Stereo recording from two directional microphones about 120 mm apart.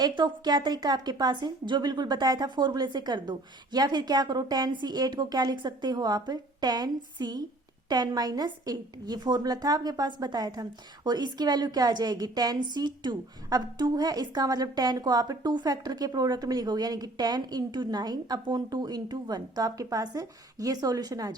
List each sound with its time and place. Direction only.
0.0 s a woman's voice: 40° right (ahead or behind)